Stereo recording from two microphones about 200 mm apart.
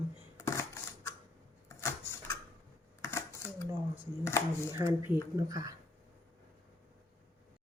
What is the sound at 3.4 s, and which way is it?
Dishes, 10° left (ahead or behind).